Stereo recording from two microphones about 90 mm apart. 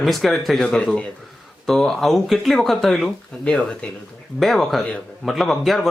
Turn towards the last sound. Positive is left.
turn(degrees=0)  # may be behind; listen again after turning